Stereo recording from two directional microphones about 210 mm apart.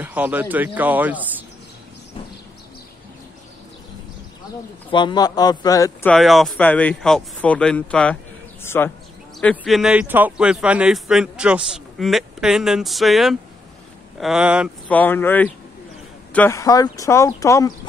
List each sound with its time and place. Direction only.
0.0 s speech: 10° right (ahead or behind)
4.9 s a man's voice: 20° left (ahead or behind)
6.0 s a man's voice: centre (ahead or behind)
14.9 s speech: 10° left (ahead or behind)